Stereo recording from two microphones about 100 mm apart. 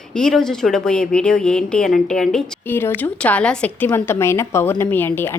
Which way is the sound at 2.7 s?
20° left (ahead or behind).